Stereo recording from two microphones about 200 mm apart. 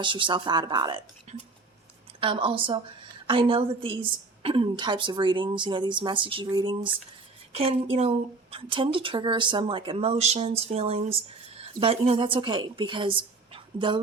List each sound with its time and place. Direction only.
0.0 s speech: 25° right (ahead or behind)